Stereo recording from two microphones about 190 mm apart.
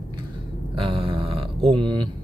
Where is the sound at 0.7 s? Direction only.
25° right (ahead or behind).